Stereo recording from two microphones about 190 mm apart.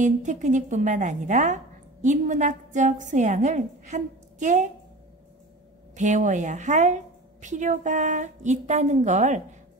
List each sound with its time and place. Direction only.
0.0 s a woman's voice: 40° right (ahead or behind)
5.9 s a woman's voice: 40° right (ahead or behind)